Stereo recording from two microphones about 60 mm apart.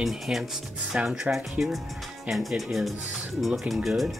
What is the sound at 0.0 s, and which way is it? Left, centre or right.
Speech, centre.